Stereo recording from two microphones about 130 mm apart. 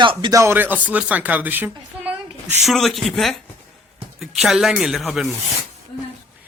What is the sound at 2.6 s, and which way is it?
Speech, centre (ahead or behind).